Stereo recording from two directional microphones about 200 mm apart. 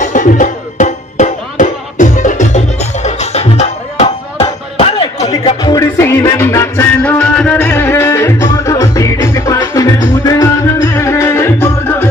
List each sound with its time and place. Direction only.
0.0 s music: 40° left (ahead or behind); by 12.1 s 10° left (ahead or behind)